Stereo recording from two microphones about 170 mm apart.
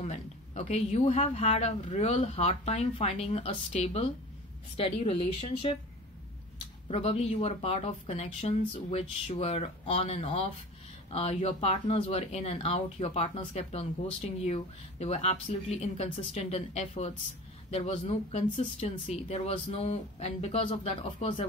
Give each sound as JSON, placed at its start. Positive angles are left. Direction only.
{"t": 0.0, "sound": "speech", "side_deg": 40}
{"t": 6.9, "sound": "speech", "side_deg": 35}